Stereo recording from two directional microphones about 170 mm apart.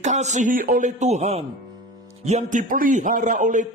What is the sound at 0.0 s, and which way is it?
A man's voice, 45° right (ahead or behind).